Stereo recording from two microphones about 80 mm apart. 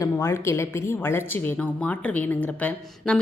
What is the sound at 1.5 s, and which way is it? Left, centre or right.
A woman's voice, centre.